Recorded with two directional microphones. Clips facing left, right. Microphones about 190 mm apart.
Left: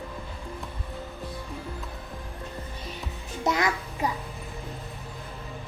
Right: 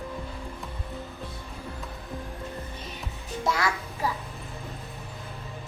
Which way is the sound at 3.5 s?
20° left (ahead or behind).